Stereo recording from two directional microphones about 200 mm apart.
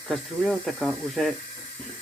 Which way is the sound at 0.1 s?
Centre (ahead or behind).